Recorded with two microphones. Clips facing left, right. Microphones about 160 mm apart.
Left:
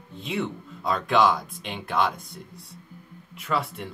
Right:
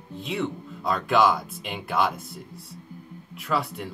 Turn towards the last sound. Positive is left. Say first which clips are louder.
# right 1 dB
turn(degrees=0)  # may be behind; listen again after turning